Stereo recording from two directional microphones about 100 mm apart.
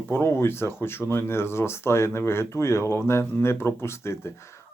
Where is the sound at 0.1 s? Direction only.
25° left (ahead or behind).